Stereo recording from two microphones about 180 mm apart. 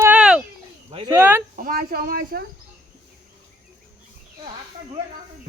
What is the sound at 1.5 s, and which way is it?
Speech, 50° right (ahead or behind).